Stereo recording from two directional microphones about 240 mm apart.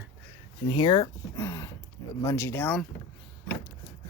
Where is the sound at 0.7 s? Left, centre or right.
Centre.